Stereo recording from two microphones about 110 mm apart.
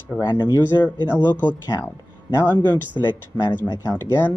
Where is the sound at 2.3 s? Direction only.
20° left (ahead or behind).